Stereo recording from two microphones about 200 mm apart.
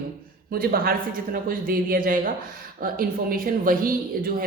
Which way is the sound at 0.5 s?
45° right (ahead or behind).